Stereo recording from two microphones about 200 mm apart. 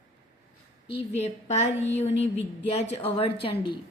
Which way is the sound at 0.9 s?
30° left (ahead or behind).